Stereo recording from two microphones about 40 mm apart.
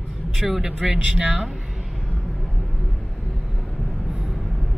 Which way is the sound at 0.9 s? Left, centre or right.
Centre.